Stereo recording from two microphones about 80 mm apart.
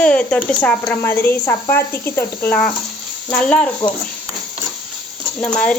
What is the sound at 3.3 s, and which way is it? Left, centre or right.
Speech, centre.